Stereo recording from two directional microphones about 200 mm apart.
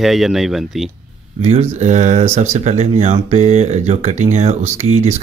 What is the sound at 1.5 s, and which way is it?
Speech, 35° right (ahead or behind).